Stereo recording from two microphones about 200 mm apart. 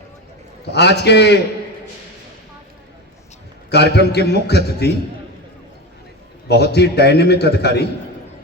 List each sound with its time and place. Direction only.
0.7 s a man's voice: 55° left (ahead or behind)
3.7 s a man's voice: 55° left (ahead or behind)
6.5 s a man's voice: 55° left (ahead or behind)